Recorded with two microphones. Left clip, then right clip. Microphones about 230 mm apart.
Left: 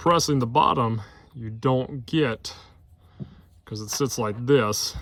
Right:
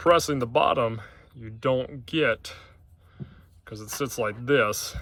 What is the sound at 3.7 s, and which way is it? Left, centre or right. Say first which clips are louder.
Speech: left 4 dB; left.